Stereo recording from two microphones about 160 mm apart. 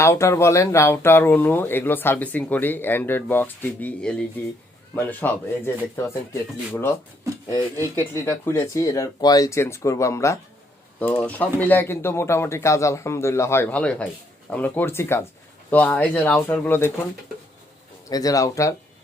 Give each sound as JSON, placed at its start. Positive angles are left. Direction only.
{"t": 0.0, "sound": "speech", "side_deg": 15}
{"t": 7.9, "sound": "speech", "side_deg": 15}
{"t": 18.1, "sound": "speech", "side_deg": 20}